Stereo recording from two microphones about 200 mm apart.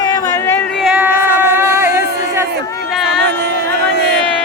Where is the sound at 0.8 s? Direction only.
5° right (ahead or behind).